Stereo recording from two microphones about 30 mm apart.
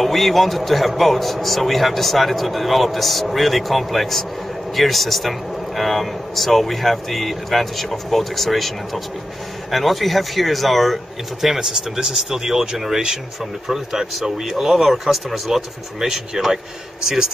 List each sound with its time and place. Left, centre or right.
0.0 s a man's voice: centre
12.0 s speech: centre